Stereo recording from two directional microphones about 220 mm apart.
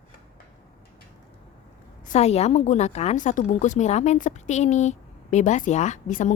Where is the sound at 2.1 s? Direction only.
30° left (ahead or behind).